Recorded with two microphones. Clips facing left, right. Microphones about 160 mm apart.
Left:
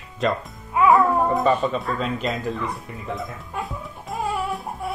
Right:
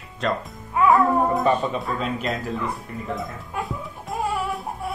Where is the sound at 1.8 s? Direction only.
Centre (ahead or behind).